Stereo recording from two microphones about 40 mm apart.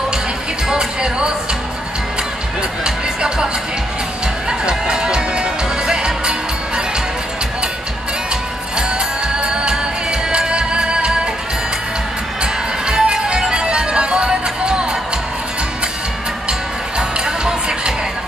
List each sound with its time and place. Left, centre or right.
0.7 s music: centre
2.8 s music: centre
4.5 s music: right
8.3 s music: right
12.8 s music: right
17.2 s music: centre